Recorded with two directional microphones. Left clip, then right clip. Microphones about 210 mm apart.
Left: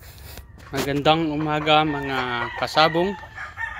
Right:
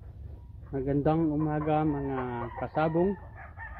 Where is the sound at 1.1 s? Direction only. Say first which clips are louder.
Left 6 dB; 25° left (ahead or behind); by 2.9 s 10° left (ahead or behind).